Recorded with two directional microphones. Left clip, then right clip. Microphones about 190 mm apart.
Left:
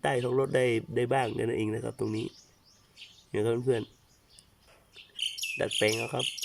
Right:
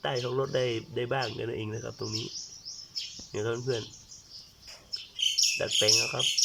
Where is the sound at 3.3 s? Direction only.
20° left (ahead or behind).